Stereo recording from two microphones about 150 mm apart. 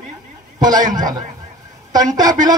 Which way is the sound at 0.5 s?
25° right (ahead or behind).